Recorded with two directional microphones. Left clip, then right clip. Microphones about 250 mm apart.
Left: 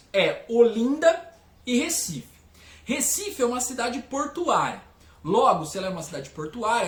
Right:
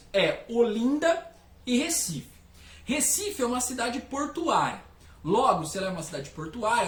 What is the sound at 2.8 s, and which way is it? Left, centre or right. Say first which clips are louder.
Speech: left 1 dB; centre.